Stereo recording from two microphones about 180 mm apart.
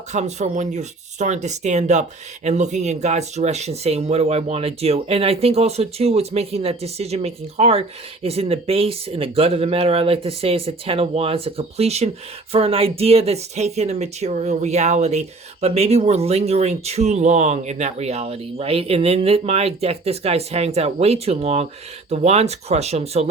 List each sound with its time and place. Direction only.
0.1 s speech: 40° right (ahead or behind)